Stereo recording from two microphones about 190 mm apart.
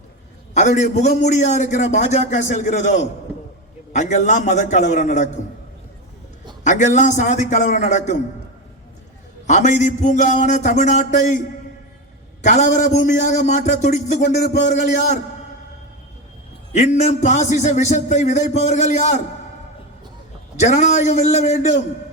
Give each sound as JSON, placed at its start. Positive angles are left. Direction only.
{"t": 0.5, "sound": "a man's voice", "side_deg": 40}
{"t": 6.7, "sound": "a man's voice", "side_deg": 40}
{"t": 9.5, "sound": "a man's voice", "side_deg": 40}
{"t": 12.4, "sound": "a man's voice", "side_deg": 40}
{"t": 16.7, "sound": "a man's voice", "side_deg": 35}
{"t": 20.6, "sound": "a man's voice", "side_deg": 35}